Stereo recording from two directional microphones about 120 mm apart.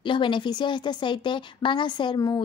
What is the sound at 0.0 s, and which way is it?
A woman's voice, 40° left (ahead or behind).